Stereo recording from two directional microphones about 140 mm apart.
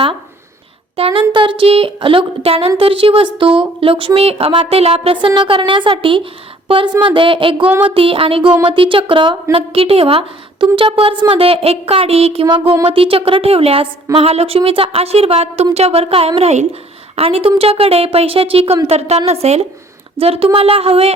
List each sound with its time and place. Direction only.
0.9 s a woman's voice: 40° right (ahead or behind)